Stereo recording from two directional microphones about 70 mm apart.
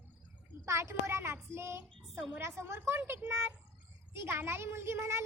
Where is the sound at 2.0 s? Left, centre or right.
Centre.